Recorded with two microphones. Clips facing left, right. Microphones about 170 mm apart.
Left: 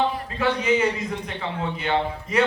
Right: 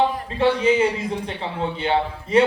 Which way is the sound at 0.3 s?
30° right (ahead or behind).